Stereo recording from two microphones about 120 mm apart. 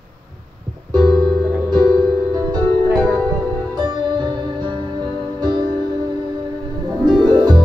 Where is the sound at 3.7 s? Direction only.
40° right (ahead or behind).